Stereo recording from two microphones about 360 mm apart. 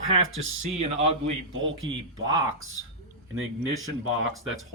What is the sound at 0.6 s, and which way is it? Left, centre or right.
Speech, centre.